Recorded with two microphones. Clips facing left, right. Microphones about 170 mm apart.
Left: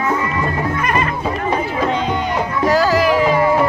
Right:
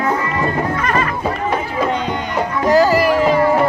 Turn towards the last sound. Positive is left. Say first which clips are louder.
# right 2 dB
turn(degrees=-15)  # may be behind; listen again after turning